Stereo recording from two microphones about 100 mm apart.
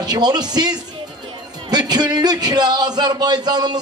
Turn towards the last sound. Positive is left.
turn(degrees=-45)  # may be behind; listen again after turning